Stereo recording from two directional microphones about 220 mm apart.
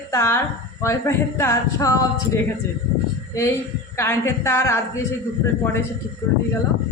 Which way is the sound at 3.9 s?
10° left (ahead or behind).